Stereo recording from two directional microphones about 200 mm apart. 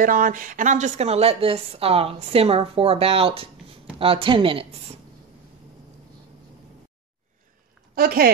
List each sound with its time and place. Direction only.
0.0 s a woman's voice: 45° right (ahead or behind); by 4.6 s 25° right (ahead or behind)
7.9 s speech: 50° right (ahead or behind)